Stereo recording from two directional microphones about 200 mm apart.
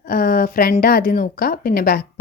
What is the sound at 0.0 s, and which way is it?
Speech, 45° left (ahead or behind).